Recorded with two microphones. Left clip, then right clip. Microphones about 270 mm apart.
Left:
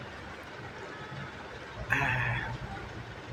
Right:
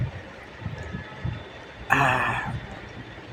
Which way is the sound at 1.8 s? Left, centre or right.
Right.